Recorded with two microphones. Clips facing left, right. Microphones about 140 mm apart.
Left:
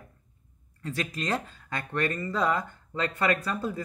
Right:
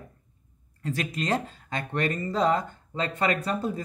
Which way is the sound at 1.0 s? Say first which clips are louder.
Right 2 dB; 25° right (ahead or behind).